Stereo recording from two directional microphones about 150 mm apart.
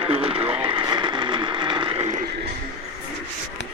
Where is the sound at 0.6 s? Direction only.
35° right (ahead or behind).